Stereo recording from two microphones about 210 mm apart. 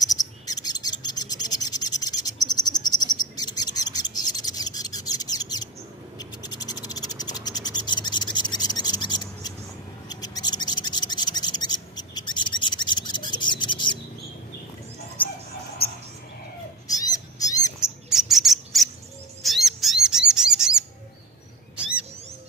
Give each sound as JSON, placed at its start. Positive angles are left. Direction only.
{"t": 0.0, "sound": "bird", "side_deg": 15}
{"t": 6.1, "sound": "frog", "side_deg": 20}
{"t": 10.0, "sound": "a sound", "side_deg": 20}
{"t": 16.8, "sound": "owl", "side_deg": 15}
{"t": 17.7, "sound": "bird", "side_deg": 0}